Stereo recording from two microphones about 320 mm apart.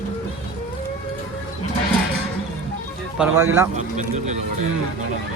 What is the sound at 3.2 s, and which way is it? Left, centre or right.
Speech, centre.